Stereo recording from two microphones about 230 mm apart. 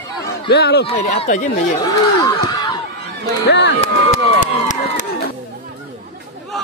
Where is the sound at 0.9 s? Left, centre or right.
Left.